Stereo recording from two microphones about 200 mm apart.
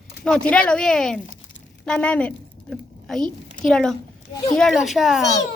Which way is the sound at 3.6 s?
5° left (ahead or behind).